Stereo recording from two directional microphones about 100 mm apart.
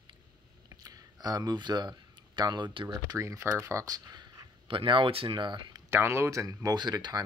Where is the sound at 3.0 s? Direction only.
30° right (ahead or behind).